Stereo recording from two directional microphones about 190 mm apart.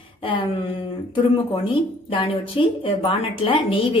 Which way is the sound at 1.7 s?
30° left (ahead or behind).